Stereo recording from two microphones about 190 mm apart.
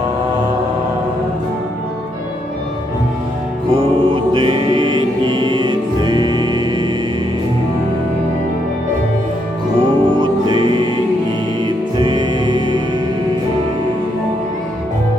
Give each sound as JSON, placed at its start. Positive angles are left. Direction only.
{"t": 3.7, "sound": "music", "side_deg": -30}
{"t": 9.7, "sound": "music", "side_deg": -25}